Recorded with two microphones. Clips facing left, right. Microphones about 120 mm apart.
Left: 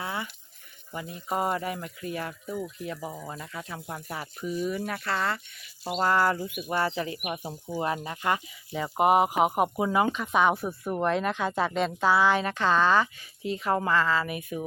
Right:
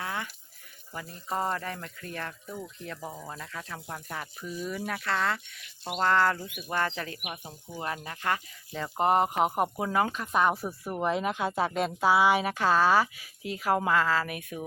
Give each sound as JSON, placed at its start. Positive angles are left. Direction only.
{"t": 0.0, "sound": "a sound", "side_deg": 5}
{"t": 0.9, "sound": "speech", "side_deg": 0}
{"t": 7.3, "sound": "speech", "side_deg": 35}
{"t": 7.8, "sound": "speech", "side_deg": 25}
{"t": 8.4, "sound": "speech", "side_deg": 10}